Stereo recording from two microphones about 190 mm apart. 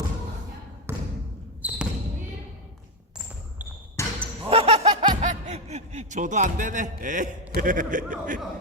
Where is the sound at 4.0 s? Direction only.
15° left (ahead or behind).